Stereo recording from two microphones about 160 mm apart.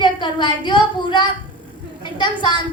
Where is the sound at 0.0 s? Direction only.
30° left (ahead or behind).